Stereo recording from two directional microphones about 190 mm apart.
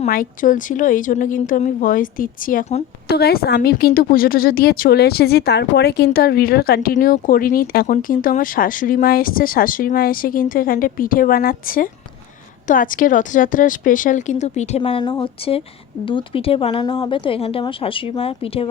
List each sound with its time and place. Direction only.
0.0 s speech: 45° left (ahead or behind)
3.1 s a woman's voice: 55° left (ahead or behind); by 14.8 s 35° left (ahead or behind)
14.8 s speech: 25° left (ahead or behind)